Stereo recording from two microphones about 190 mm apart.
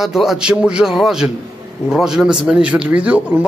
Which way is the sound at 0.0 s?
Centre (ahead or behind).